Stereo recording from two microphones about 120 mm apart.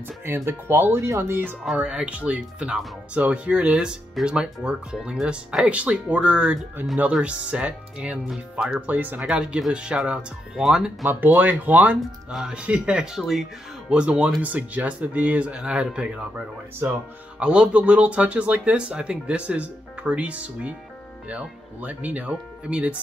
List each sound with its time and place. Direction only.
0.2 s speech: 20° right (ahead or behind)
1.6 s speech: centre (ahead or behind)
11.1 s speech: 15° right (ahead or behind)